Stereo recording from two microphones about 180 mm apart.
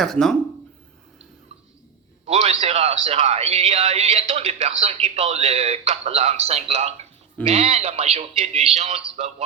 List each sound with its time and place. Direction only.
0.0 s speech: centre (ahead or behind)
2.2 s speech: 35° right (ahead or behind)